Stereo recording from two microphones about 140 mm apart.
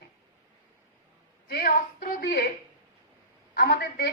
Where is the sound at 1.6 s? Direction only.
80° left.